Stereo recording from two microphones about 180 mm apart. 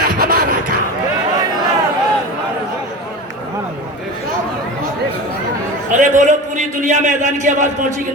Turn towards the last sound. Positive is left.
turn(degrees=-45)  # may be behind; listen again after turning